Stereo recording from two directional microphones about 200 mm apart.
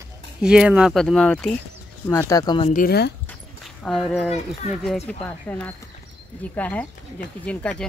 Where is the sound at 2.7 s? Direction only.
45° left (ahead or behind).